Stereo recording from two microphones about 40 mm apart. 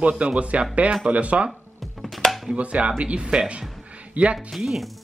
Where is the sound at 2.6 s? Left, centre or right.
Right.